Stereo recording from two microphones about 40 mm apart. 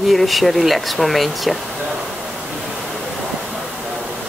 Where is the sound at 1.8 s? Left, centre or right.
Centre.